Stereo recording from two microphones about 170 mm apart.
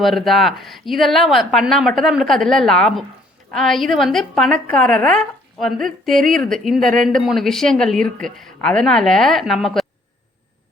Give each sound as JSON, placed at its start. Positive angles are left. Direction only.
{"t": 0.0, "sound": "a woman's voice", "side_deg": 0}